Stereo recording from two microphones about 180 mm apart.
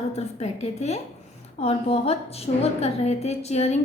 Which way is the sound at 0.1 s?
35° left (ahead or behind).